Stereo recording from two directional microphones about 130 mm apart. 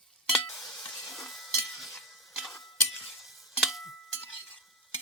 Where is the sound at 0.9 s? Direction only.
5° left (ahead or behind).